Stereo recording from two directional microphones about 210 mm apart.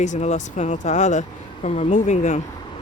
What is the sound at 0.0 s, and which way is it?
Speech, 35° left (ahead or behind).